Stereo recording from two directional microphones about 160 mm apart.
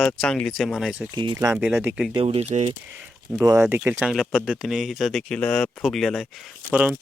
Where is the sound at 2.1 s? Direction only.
40° right (ahead or behind).